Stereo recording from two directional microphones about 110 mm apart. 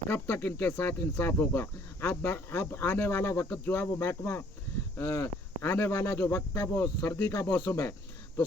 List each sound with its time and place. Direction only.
0.1 s speech: 20° left (ahead or behind)
6.3 s speech: 25° left (ahead or behind)